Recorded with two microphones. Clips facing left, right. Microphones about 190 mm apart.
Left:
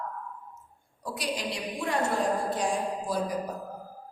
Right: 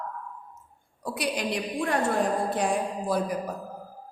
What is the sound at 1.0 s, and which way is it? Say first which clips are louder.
Speech: right 5 dB; 60° right (ahead or behind).